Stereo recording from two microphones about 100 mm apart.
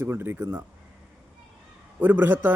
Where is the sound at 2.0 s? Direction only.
15° right (ahead or behind).